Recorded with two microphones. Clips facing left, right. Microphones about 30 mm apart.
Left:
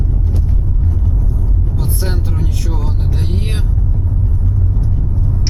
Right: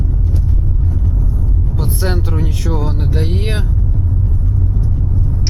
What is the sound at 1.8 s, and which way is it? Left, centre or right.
Speech, centre.